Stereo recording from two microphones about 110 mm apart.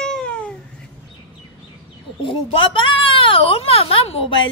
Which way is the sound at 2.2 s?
50° left (ahead or behind).